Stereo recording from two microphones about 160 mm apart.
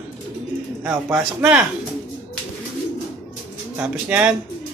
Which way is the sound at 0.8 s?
10° right (ahead or behind).